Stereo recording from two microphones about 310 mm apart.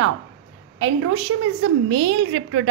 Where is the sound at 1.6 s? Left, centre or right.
Right.